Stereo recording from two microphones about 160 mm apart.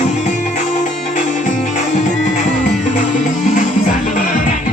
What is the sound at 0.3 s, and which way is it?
Music, 50° left (ahead or behind).